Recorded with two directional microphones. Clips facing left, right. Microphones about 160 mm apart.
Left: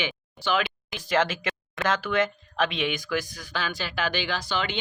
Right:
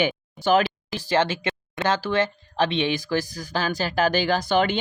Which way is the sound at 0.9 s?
30° right (ahead or behind).